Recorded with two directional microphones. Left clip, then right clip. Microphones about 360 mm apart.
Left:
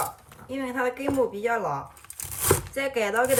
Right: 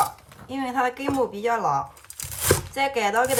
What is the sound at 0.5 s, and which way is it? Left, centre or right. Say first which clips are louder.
Speech: right 3 dB; centre.